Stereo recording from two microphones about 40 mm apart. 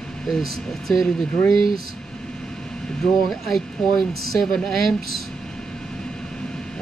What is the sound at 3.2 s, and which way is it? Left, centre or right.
Speech, centre.